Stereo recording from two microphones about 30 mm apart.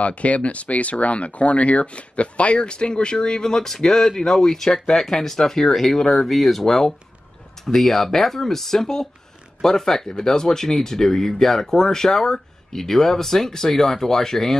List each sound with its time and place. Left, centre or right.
0.0 s speech: left; by 14.6 s centre